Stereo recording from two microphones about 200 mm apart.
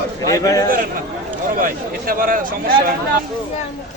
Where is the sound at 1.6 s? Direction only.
45° right (ahead or behind).